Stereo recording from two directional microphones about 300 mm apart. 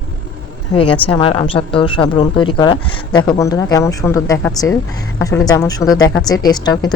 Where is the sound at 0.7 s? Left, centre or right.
Centre.